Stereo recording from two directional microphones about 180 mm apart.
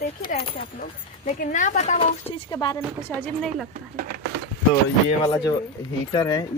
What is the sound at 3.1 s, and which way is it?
Speech, 10° left (ahead or behind).